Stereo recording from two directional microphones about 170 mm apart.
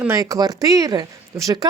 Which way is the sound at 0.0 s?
20° right (ahead or behind).